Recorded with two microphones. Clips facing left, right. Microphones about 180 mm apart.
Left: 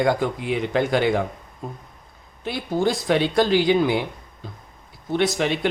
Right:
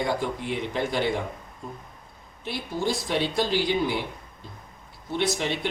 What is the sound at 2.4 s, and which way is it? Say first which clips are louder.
Speech: left 6 dB; 55° left (ahead or behind).